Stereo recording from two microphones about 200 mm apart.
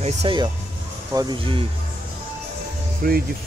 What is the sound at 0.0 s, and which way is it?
Speech, 30° right (ahead or behind).